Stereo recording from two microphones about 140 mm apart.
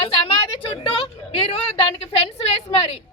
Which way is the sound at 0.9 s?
40° left (ahead or behind).